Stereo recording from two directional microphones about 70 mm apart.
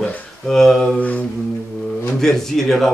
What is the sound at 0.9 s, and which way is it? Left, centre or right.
Mantra, left.